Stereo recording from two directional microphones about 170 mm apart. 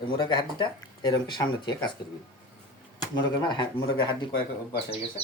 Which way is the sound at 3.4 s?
25° left (ahead or behind).